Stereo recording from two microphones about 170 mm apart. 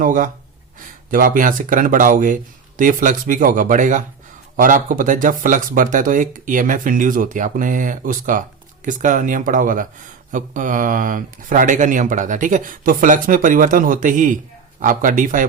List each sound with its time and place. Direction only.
0.0 s speech: 50° right (ahead or behind)